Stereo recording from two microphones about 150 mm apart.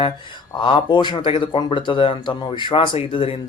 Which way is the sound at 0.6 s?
30° left (ahead or behind).